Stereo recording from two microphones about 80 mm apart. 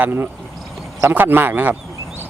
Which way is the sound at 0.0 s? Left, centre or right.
Right.